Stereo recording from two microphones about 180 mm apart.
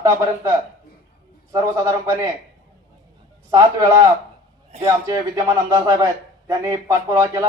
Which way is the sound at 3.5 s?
15° right (ahead or behind).